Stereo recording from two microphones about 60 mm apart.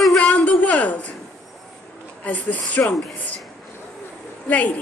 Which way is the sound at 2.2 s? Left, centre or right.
Left.